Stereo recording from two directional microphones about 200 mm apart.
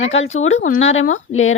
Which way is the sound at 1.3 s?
90° left.